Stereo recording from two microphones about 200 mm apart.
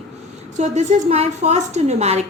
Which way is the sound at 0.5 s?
35° right (ahead or behind).